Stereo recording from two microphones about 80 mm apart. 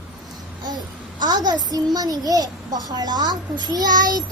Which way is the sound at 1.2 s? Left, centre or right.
Right.